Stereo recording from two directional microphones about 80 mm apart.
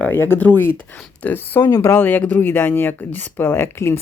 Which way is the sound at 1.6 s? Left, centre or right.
Left.